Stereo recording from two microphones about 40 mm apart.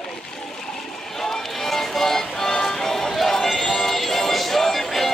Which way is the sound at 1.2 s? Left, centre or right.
Centre.